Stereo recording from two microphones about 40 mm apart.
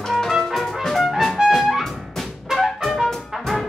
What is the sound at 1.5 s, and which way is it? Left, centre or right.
Music, centre.